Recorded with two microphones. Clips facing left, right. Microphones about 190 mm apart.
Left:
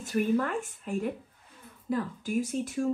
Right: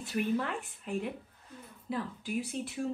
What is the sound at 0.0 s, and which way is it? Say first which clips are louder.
Speech: left 5 dB; 45° left (ahead or behind).